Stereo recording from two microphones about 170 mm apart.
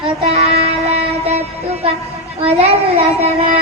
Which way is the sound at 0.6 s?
40° right (ahead or behind).